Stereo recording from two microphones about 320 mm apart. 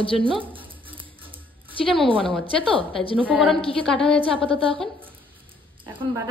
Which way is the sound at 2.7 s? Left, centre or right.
Centre.